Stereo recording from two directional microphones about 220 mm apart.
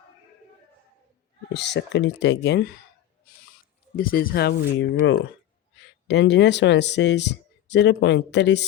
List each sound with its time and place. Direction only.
1.5 s speech: 50° left (ahead or behind)
3.9 s speech: 40° left (ahead or behind)
6.1 s speech: 50° left (ahead or behind)